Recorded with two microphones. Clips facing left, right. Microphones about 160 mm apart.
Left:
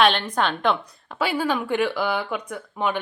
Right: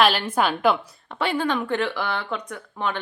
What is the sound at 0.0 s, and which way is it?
A woman's voice, 5° right (ahead or behind).